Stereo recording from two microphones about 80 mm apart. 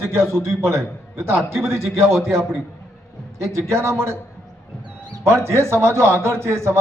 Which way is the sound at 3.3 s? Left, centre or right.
Right.